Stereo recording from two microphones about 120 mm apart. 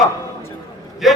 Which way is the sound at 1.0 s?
Centre (ahead or behind).